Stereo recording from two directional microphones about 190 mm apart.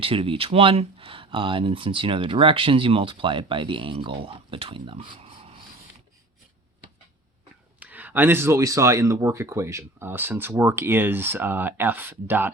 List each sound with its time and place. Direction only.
0.0 s speech: 30° right (ahead or behind)
7.8 s speech: 10° right (ahead or behind)